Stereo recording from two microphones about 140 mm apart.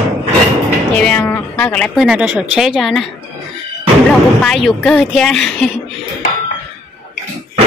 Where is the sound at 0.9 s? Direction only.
10° left (ahead or behind).